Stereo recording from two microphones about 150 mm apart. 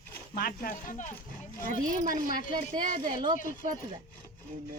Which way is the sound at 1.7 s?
60° right (ahead or behind).